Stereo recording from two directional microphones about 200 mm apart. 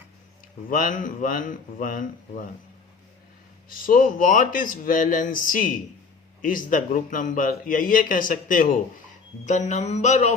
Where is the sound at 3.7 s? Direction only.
45° left (ahead or behind).